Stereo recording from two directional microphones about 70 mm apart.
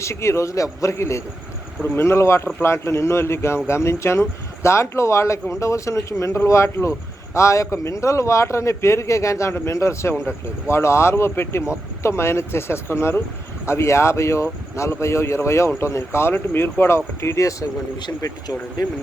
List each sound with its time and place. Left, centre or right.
0.0 s speech: left
18.0 s speech: left